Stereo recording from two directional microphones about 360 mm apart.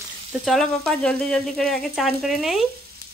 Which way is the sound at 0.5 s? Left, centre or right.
Centre.